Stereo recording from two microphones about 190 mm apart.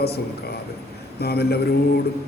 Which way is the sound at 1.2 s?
55° left (ahead or behind).